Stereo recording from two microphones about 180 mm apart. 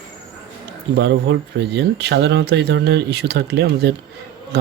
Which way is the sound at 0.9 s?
75° right (ahead or behind).